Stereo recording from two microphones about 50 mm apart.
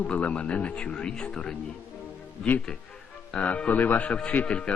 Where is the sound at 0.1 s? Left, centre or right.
Left.